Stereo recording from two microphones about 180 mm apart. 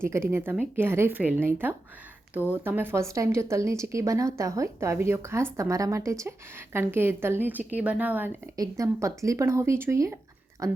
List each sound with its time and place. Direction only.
0.0 s speech: 15° right (ahead or behind)